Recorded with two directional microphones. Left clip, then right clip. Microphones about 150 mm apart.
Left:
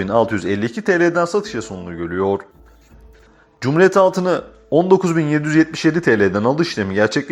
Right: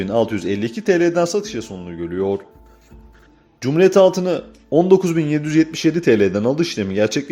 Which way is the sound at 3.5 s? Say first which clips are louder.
Even; 20° right (ahead or behind).